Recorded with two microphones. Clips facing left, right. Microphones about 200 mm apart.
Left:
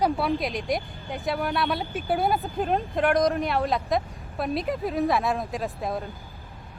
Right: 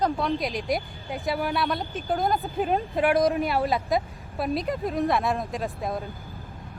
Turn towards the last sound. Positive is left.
turn(degrees=0)  # may be behind; listen again after turning